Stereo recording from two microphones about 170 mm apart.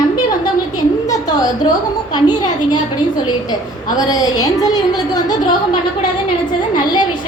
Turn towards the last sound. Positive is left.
turn(degrees=25)  # may be behind; listen again after turning